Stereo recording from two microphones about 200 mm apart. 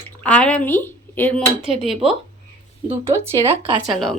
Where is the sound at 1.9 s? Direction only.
30° right (ahead or behind).